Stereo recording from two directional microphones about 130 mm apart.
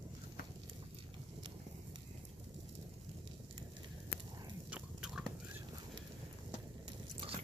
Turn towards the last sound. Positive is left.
turn(degrees=-45)  # may be behind; listen again after turning